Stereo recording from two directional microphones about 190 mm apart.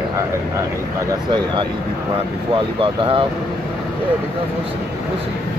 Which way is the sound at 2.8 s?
25° right (ahead or behind).